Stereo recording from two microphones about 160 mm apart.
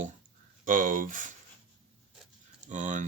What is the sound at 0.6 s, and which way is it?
Speech, 55° right (ahead or behind).